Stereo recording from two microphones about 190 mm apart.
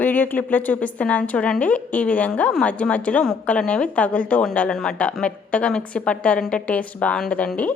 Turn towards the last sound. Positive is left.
turn(degrees=5)  # may be behind; listen again after turning